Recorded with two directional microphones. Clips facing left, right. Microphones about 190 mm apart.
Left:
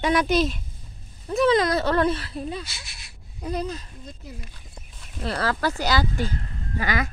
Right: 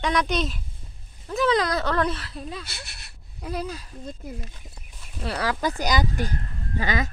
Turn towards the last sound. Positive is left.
turn(degrees=-20)  # may be behind; listen again after turning